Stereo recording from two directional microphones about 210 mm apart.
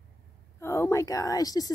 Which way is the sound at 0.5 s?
15° left (ahead or behind).